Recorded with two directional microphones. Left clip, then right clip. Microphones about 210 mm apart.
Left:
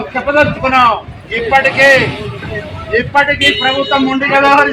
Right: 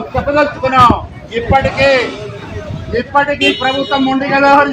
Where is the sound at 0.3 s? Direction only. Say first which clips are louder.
Left 2 dB; 15° left (ahead or behind).